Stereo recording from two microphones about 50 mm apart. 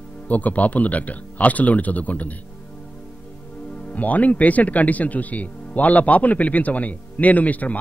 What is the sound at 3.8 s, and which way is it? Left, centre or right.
Speech, left.